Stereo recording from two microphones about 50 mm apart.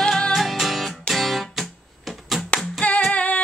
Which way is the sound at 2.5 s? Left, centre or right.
Left.